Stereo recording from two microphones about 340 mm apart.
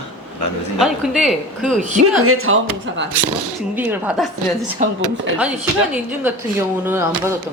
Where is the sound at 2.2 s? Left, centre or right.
Right.